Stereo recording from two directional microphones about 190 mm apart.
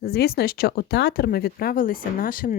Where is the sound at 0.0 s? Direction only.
55° left (ahead or behind).